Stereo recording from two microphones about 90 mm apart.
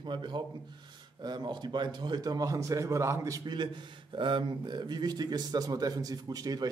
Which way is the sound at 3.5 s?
55° right (ahead or behind).